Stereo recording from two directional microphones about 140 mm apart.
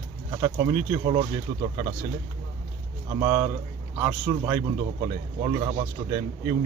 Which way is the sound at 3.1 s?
20° right (ahead or behind).